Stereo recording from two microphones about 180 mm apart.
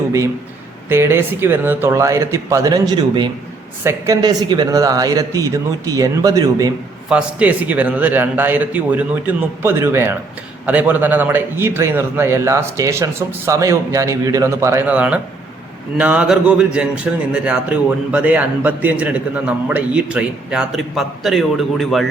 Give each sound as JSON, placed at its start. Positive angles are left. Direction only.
{"t": 0.9, "sound": "a man's voice", "side_deg": -15}
{"t": 7.1, "sound": "a man's voice", "side_deg": -5}